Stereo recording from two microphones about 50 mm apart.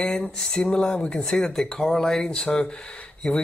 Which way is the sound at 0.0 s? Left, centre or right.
Centre.